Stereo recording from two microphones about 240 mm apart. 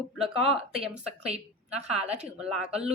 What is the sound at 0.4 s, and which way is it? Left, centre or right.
Speech, right.